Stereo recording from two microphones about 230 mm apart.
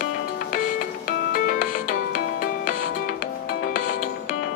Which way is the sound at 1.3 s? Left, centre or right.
Left.